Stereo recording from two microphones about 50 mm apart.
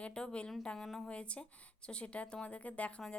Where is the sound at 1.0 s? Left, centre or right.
Left.